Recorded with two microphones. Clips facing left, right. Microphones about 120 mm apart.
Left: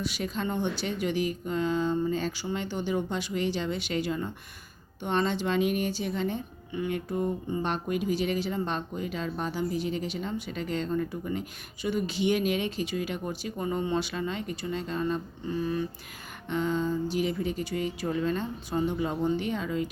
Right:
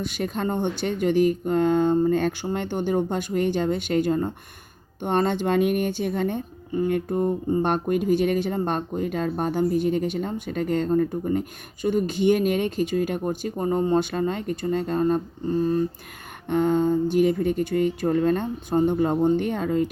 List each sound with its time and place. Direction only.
0.0 s a woman's voice: 50° right (ahead or behind)
16.5 s a woman's voice: 55° right (ahead or behind)